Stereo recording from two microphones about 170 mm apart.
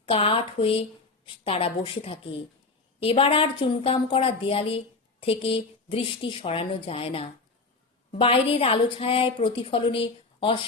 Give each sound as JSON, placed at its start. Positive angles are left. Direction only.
{"t": 0.0, "sound": "a woman's voice", "side_deg": 35}